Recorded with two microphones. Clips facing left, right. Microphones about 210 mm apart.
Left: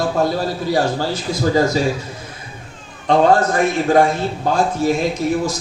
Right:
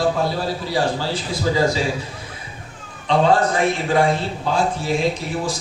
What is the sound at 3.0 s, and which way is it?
Speech, 45° left (ahead or behind).